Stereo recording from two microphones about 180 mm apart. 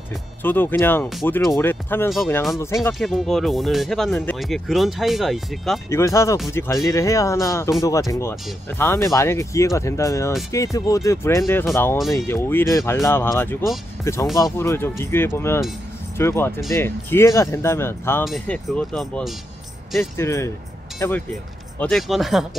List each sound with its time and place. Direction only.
0.4 s speech: 10° left (ahead or behind)
2.9 s speech: centre (ahead or behind)
5.9 s speech: 15° left (ahead or behind)
18.2 s speech: centre (ahead or behind)
20.0 s speech: 15° left (ahead or behind)
21.7 s speech: 5° left (ahead or behind)